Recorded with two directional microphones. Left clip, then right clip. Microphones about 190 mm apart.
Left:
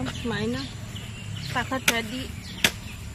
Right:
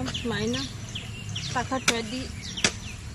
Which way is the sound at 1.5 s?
10° right (ahead or behind).